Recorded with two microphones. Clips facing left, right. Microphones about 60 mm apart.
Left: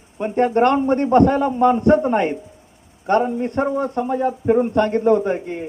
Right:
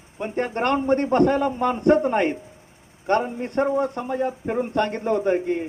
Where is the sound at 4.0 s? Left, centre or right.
Left.